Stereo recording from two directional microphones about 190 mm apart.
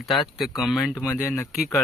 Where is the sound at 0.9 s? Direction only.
10° left (ahead or behind).